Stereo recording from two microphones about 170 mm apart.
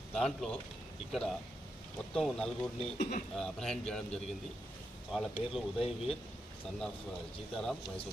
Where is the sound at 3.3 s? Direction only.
5° left (ahead or behind).